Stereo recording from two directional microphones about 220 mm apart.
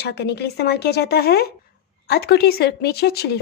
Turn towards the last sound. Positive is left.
turn(degrees=45)  # may be behind; listen again after turning